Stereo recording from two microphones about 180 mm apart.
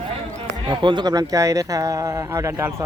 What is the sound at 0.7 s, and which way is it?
A man's voice, 25° right (ahead or behind).